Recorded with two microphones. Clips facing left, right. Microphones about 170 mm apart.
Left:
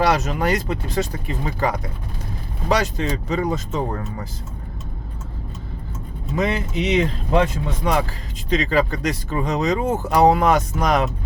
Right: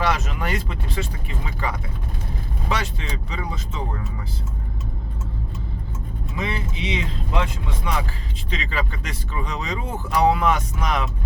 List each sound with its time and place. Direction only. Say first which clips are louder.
0.0 s speech: left 5 dB; 40° left (ahead or behind)
6.3 s speech: left 7 dB; 45° left (ahead or behind)
8.4 s speech: left 10 dB; 40° left (ahead or behind)